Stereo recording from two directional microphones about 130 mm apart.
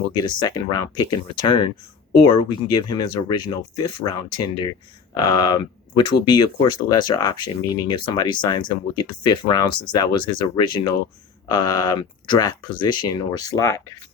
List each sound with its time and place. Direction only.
0.2 s speech: 30° left (ahead or behind)